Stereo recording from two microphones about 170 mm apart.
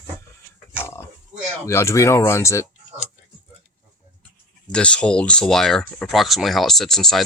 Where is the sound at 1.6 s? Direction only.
15° left (ahead or behind).